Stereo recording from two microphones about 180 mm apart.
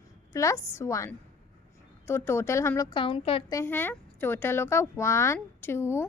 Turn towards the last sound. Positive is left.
turn(degrees=15)  # may be behind; listen again after turning